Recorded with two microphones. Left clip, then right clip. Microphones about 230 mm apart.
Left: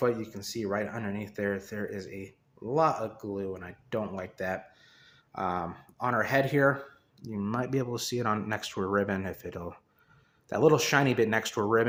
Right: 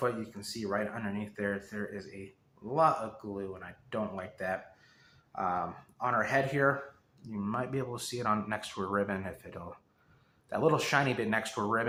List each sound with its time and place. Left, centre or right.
0.0 s speech: left